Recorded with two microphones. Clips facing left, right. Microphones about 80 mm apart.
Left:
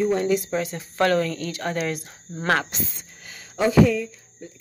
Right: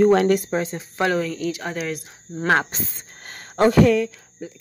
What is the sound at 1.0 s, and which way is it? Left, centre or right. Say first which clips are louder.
Speech: left 1 dB; centre.